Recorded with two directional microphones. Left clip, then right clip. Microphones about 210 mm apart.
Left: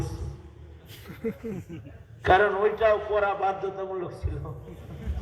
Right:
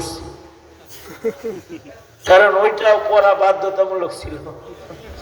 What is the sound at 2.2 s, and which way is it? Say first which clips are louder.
A man's voice: right 10 dB; 55° right (ahead or behind).